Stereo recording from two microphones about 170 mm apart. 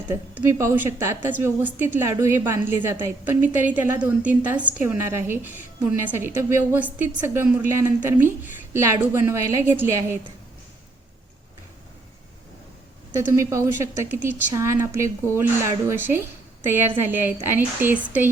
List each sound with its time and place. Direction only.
0.1 s a woman's voice: 15° right (ahead or behind)
13.3 s a woman's voice: 15° right (ahead or behind)